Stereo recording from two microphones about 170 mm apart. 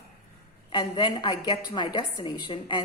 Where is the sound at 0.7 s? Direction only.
25° left (ahead or behind).